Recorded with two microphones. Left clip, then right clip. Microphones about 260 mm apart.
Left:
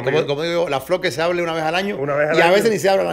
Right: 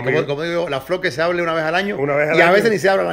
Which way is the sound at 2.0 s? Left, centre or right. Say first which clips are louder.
Right 1 dB; right.